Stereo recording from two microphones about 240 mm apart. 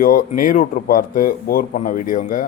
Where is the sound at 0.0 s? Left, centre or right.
Left.